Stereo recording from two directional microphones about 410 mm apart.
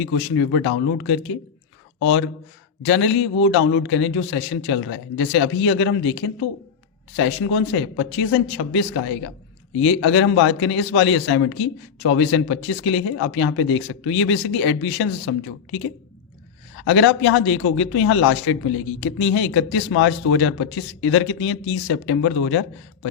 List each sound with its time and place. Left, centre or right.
0.0 s speech: left
16.9 s speech: left